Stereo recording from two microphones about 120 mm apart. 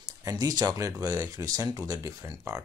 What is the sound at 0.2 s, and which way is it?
Speech, 30° right (ahead or behind).